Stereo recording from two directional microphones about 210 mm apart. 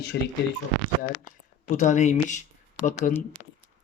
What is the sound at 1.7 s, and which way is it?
Speech, 35° left (ahead or behind).